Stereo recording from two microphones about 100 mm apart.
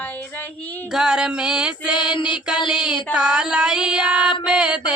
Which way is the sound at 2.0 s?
55° left (ahead or behind).